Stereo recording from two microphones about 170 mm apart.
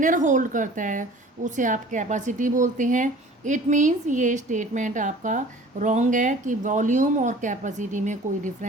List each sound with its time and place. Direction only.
0.0 s speech: 50° right (ahead or behind)